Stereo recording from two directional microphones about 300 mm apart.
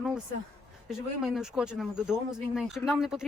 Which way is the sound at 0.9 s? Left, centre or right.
Centre.